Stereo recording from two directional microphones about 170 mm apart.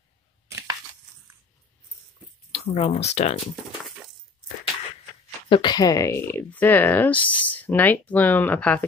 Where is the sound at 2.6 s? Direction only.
40° left (ahead or behind).